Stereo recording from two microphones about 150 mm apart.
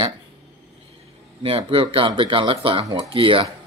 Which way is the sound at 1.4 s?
35° right (ahead or behind).